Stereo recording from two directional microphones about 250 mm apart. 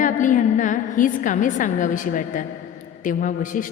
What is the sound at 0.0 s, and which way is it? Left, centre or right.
A woman's voice, left.